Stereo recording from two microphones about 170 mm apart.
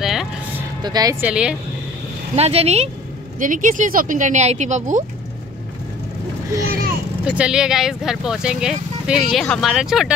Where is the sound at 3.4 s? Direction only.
50° right (ahead or behind).